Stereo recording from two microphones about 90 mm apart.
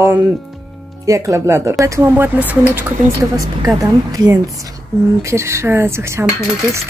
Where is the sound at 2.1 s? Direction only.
20° right (ahead or behind).